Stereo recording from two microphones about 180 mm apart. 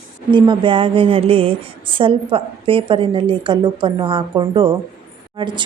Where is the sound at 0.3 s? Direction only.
25° right (ahead or behind).